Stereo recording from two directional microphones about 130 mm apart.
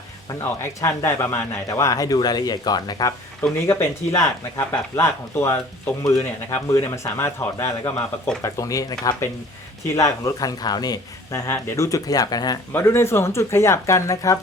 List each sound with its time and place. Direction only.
0.3 s speech: 20° left (ahead or behind)
3.7 s speech: 20° left (ahead or behind)
12.7 s speech: 20° left (ahead or behind)